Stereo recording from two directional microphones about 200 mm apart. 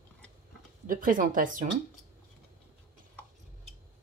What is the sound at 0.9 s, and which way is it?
Speech, 45° right (ahead or behind).